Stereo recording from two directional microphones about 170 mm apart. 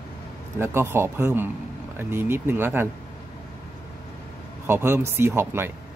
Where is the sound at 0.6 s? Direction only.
15° right (ahead or behind).